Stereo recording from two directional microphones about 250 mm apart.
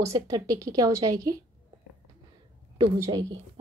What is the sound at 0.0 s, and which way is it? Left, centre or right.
Speech, centre.